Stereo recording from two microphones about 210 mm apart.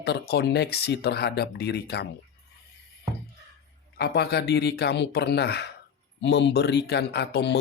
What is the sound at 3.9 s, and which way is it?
Speech, 50° left (ahead or behind).